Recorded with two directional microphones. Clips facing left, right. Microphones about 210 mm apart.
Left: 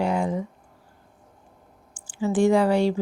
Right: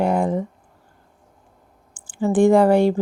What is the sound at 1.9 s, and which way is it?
Speech, 55° right (ahead or behind).